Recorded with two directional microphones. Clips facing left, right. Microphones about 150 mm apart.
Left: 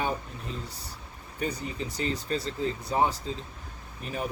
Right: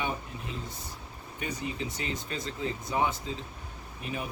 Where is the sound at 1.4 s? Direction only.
35° left (ahead or behind).